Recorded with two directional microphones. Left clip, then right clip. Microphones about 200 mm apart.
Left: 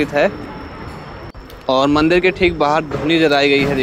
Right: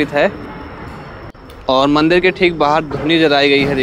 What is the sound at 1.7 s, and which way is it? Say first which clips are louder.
Speech: right 2 dB; 5° right (ahead or behind).